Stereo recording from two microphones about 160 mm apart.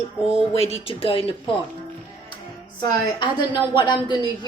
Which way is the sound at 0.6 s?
40° left (ahead or behind).